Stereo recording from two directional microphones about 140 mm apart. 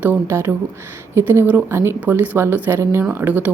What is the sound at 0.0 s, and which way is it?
A woman's voice, 15° right (ahead or behind).